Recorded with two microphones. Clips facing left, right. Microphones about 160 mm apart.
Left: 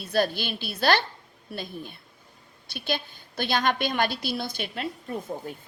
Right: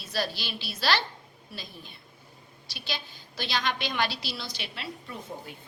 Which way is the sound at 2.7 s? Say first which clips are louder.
Left 8 dB; 55° left (ahead or behind).